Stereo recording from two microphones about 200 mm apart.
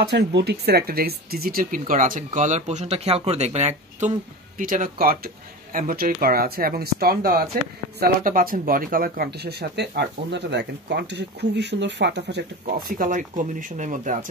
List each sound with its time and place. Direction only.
0.0 s speech: 60° right (ahead or behind)
12.6 s speech: 45° right (ahead or behind)